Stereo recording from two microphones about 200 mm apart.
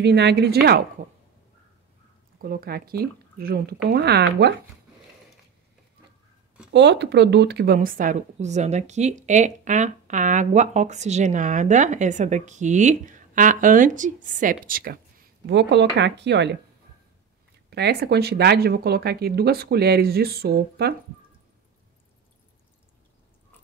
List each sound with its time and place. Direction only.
0.0 s speech: 60° right (ahead or behind)
2.4 s speech: 50° right (ahead or behind)
6.7 s speech: 60° right (ahead or behind); by 15.0 s 45° right (ahead or behind)
15.4 s speech: 60° right (ahead or behind)
17.6 s speech: 55° right (ahead or behind)